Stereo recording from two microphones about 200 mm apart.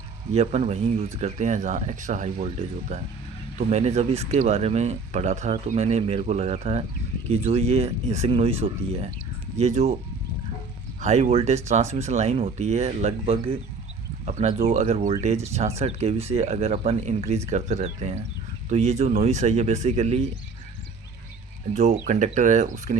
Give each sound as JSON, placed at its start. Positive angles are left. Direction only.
{"t": 0.3, "sound": "speech", "side_deg": -30}
{"t": 11.0, "sound": "speech", "side_deg": -35}
{"t": 21.7, "sound": "speech", "side_deg": -35}